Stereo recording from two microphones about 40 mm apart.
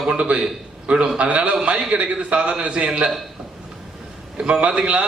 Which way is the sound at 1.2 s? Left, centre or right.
Right.